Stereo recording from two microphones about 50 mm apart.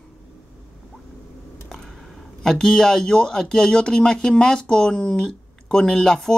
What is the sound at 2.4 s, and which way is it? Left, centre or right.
Speech, centre.